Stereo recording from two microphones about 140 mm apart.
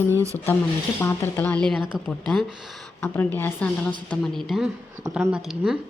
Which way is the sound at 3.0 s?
15° left (ahead or behind).